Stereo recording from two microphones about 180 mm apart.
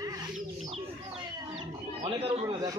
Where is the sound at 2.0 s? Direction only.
30° right (ahead or behind).